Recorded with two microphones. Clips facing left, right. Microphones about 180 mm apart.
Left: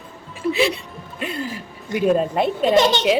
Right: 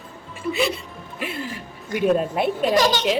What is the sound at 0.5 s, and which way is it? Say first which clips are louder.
Speech: left 2 dB; centre (ahead or behind).